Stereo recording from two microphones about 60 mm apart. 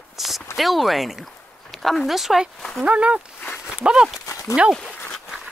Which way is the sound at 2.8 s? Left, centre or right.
Right.